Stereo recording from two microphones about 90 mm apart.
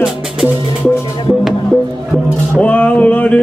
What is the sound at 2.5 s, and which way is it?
Music, 15° left (ahead or behind).